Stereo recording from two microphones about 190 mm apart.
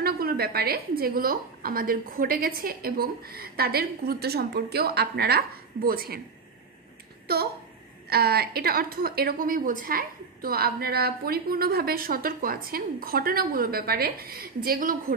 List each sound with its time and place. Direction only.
0.0 s a woman's voice: 55° right (ahead or behind)
7.3 s a woman's voice: 55° right (ahead or behind)